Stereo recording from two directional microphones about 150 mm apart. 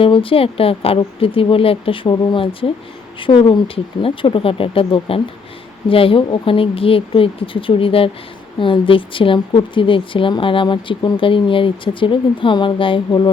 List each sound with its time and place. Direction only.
0.0 s speech: 35° left (ahead or behind)